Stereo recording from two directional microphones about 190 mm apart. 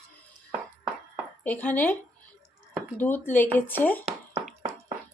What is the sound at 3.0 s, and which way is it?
Speech, 10° left (ahead or behind).